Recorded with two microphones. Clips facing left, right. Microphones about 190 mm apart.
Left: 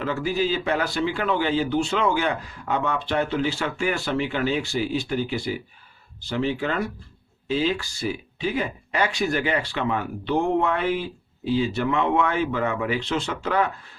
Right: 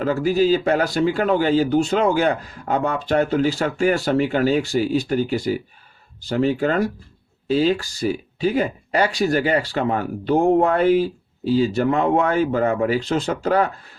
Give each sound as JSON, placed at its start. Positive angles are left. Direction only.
{"t": 0.0, "sound": "speech", "side_deg": -40}